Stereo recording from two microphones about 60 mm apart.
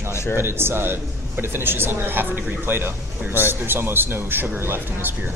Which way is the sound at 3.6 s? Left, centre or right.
Right.